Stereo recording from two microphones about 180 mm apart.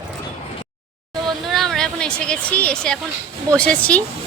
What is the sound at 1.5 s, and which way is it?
Speech, centre (ahead or behind).